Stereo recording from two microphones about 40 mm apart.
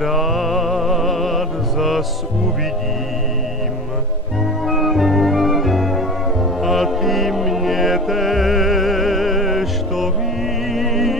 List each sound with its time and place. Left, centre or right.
0.0 s music: centre
4.6 s music: centre